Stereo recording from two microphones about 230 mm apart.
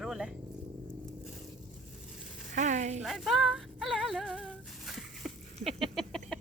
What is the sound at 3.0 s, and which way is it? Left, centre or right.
Music, centre.